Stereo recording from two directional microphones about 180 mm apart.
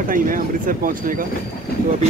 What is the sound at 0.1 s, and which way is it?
Speech, 50° right (ahead or behind).